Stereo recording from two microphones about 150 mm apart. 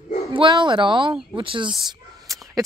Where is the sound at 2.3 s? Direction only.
25° right (ahead or behind).